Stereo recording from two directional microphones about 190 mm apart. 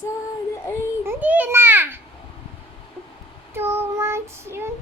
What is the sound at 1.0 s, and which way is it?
Babbling, 10° right (ahead or behind).